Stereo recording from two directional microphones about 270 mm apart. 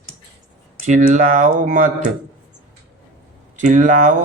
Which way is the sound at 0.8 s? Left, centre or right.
Right.